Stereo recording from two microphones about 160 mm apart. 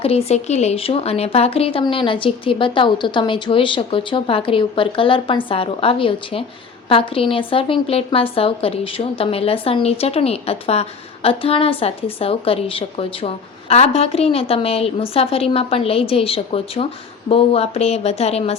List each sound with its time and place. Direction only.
0.0 s a woman's voice: 40° left (ahead or behind)